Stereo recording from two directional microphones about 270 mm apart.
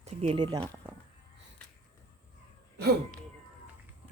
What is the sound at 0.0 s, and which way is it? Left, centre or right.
Speech, right.